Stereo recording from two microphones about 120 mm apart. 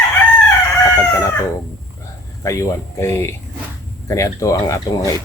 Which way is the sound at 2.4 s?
25° left (ahead or behind).